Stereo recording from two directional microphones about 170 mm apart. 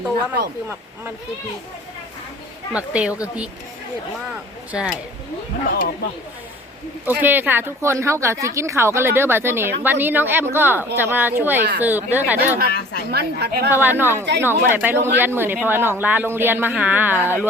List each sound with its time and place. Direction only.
2.7 s a woman's voice: 5° right (ahead or behind)
4.7 s speech: 5° right (ahead or behind)
5.7 s speech: 70° left (ahead or behind)
7.0 s a woman's voice: 10° right (ahead or behind)
13.1 s a woman's voice: 70° right (ahead or behind)
13.7 s a woman's voice: 10° right (ahead or behind)